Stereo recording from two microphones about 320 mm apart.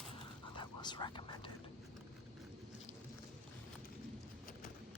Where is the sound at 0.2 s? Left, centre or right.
Centre.